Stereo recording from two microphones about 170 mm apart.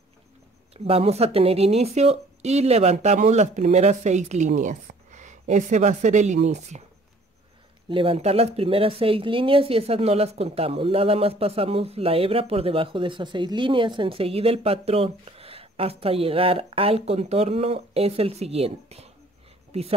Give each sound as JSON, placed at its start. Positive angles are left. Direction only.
{"t": 0.8, "sound": "a woman's voice", "side_deg": -35}
{"t": 7.9, "sound": "speech", "side_deg": -35}